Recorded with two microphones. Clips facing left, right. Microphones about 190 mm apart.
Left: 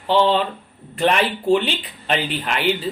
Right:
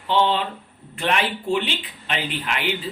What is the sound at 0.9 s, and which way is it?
Speech, 40° left (ahead or behind).